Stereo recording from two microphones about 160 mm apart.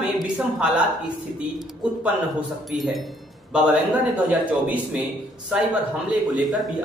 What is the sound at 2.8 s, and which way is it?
Speech, centre (ahead or behind).